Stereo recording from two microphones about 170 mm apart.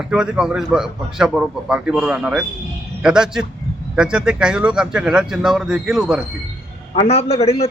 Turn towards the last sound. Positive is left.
turn(degrees=35)  # may be behind; listen again after turning